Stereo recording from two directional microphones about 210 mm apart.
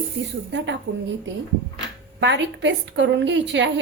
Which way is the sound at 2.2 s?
55° right (ahead or behind).